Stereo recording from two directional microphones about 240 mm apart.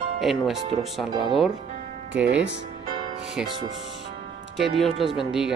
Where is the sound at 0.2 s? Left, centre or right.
Centre.